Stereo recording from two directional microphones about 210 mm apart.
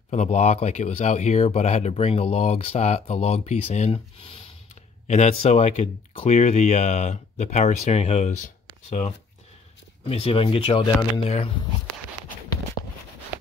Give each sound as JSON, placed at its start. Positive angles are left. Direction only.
{"t": 0.1, "sound": "speech", "side_deg": 35}
{"t": 10.0, "sound": "speech", "side_deg": 30}